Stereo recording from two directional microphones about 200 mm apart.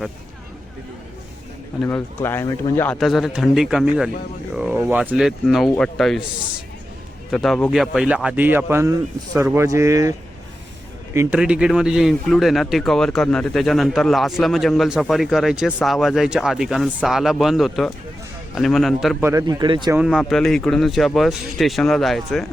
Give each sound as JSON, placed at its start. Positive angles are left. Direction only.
{"t": 1.9, "sound": "a man's voice", "side_deg": 10}
{"t": 7.3, "sound": "a man's voice", "side_deg": 0}
{"t": 19.2, "sound": "speech", "side_deg": -15}
{"t": 19.9, "sound": "a man's voice", "side_deg": -5}